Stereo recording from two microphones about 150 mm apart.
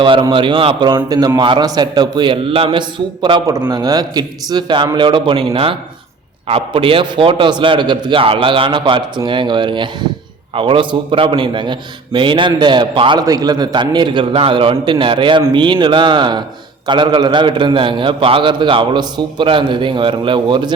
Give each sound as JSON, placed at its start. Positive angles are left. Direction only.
{"t": 0.0, "sound": "a man's voice", "side_deg": -35}